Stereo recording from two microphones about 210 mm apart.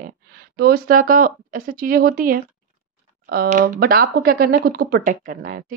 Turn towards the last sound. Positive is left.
turn(degrees=-40)  # may be behind; listen again after turning